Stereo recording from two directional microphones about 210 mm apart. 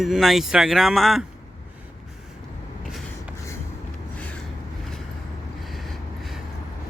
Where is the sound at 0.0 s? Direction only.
Centre (ahead or behind).